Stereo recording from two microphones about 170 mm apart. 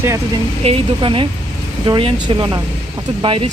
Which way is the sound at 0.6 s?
30° right (ahead or behind).